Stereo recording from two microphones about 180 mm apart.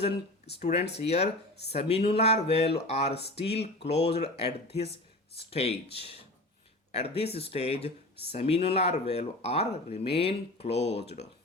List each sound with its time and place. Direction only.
0.0 s speech: 35° left (ahead or behind)
3.2 s speech: 65° left (ahead or behind)
3.8 s speech: 35° left (ahead or behind)